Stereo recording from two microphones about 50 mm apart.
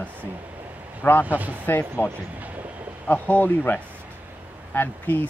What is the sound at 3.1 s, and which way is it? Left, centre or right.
Speech, left.